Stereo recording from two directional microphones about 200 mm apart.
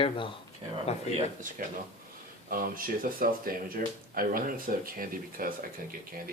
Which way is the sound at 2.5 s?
45° right (ahead or behind).